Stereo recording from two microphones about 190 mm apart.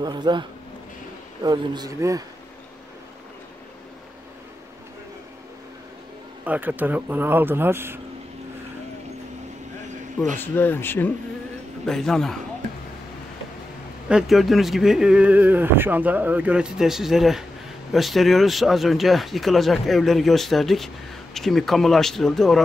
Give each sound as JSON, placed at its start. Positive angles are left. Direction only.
{"t": 0.0, "sound": "speech", "side_deg": -20}
{"t": 6.4, "sound": "speech", "side_deg": -10}
{"t": 10.4, "sound": "speech", "side_deg": 10}
{"t": 14.0, "sound": "speech", "side_deg": -5}